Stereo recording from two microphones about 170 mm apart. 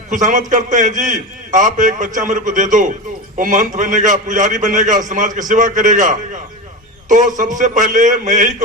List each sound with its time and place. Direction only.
0.1 s a man's voice: 50° right (ahead or behind)